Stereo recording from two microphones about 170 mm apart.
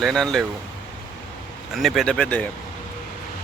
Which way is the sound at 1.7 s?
Centre (ahead or behind).